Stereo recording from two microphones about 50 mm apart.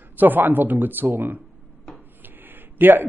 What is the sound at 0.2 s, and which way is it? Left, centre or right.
A man's voice, right.